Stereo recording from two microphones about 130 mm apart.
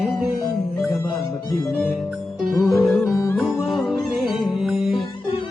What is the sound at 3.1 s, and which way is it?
Yodeling, 25° left (ahead or behind).